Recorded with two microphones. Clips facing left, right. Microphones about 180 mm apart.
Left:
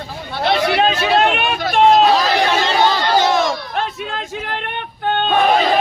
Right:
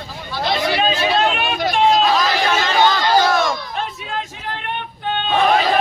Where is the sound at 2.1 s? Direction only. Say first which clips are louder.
Left 2 dB; 30° left (ahead or behind).